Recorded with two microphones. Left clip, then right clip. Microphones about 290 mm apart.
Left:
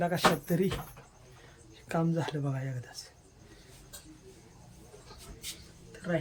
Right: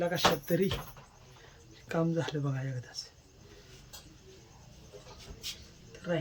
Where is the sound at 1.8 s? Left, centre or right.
Centre.